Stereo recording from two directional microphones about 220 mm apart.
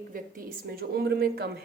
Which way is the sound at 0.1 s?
40° right (ahead or behind).